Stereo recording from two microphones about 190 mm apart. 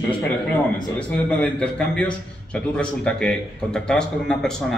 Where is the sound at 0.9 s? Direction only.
5° left (ahead or behind).